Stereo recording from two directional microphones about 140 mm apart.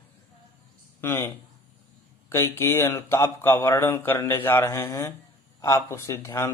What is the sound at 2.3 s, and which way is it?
Speech, 20° left (ahead or behind).